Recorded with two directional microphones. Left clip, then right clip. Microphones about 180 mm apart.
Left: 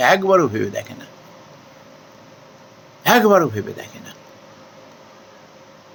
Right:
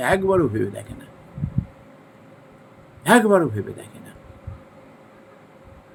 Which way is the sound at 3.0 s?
15° right (ahead or behind).